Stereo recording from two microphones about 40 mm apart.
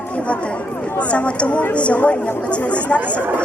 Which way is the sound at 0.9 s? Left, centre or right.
Left.